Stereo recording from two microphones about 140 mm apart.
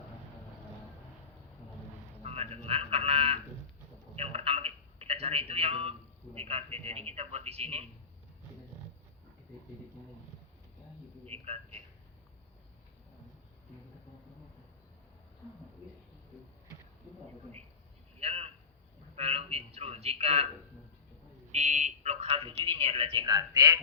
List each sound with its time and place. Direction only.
2.2 s frog: 45° right (ahead or behind)
4.1 s telephone: 45° right (ahead or behind)
11.3 s a sound: 45° right (ahead or behind)
18.2 s a sound: 45° right (ahead or behind)
19.1 s a man's voice: 45° right (ahead or behind)
21.5 s a man's voice: 55° right (ahead or behind)
23.2 s a man's voice: 25° right (ahead or behind)